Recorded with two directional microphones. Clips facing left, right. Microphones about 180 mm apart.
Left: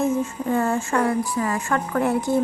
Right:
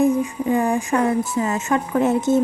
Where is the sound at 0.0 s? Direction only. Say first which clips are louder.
Right 4 dB; 15° right (ahead or behind).